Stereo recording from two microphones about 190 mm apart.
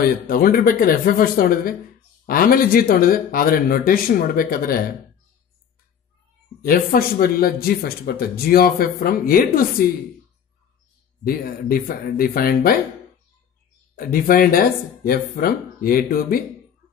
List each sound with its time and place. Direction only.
0.0 s speech: 50° left (ahead or behind)
6.6 s speech: 50° left (ahead or behind)
11.2 s speech: 50° left (ahead or behind)
13.9 s speech: 50° left (ahead or behind)